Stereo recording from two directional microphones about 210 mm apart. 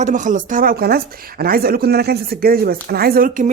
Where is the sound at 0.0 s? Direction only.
35° right (ahead or behind).